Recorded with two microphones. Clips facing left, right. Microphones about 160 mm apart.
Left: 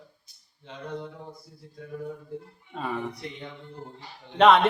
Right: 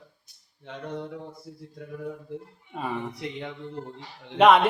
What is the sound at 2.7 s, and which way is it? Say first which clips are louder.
Speech: even; 10° right (ahead or behind).